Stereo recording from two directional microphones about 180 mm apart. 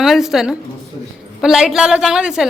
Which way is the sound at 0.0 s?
Centre (ahead or behind).